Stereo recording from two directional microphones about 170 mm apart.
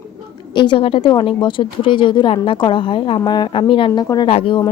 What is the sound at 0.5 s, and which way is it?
Speech, 30° left (ahead or behind).